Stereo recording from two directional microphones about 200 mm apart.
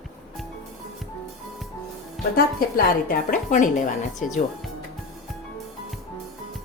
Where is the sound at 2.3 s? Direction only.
45° left (ahead or behind).